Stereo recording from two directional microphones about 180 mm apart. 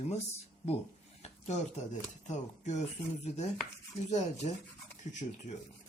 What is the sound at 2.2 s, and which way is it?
Speech, 40° left (ahead or behind).